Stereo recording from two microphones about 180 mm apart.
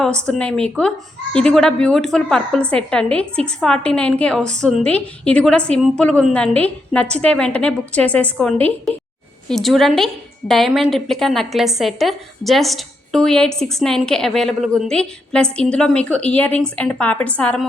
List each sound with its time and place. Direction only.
0.3 s a woman's voice: 5° left (ahead or behind)